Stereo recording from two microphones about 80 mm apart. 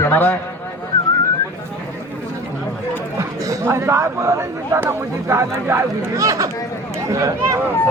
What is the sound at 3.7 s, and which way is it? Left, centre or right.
Speech, right.